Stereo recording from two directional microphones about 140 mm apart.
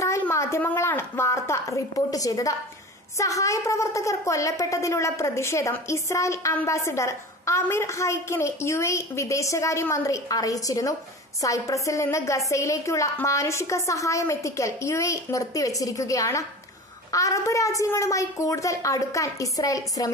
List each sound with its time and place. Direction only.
0.0 s a woman's voice: 20° left (ahead or behind)